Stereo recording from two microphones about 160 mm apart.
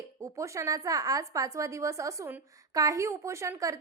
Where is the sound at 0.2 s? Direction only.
20° right (ahead or behind).